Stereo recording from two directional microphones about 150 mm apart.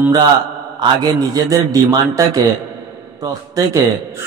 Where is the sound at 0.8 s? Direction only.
25° right (ahead or behind).